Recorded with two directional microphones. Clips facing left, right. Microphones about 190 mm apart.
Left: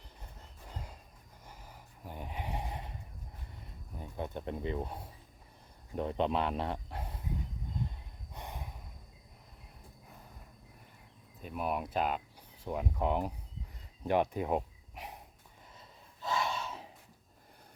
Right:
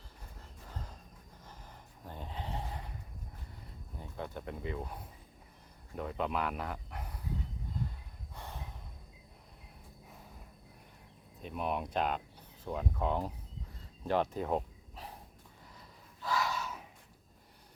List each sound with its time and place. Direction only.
0.7 s a sound: 10° left (ahead or behind)
2.0 s a sound: 15° left (ahead or behind)
3.9 s speech: 15° left (ahead or behind)
8.4 s snort: 15° left (ahead or behind)
11.4 s speech: 5° left (ahead or behind)
14.0 s cricket: 15° left (ahead or behind)
16.2 s gasp: 25° left (ahead or behind)